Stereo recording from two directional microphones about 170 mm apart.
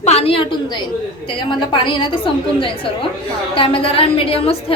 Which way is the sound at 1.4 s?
30° left (ahead or behind).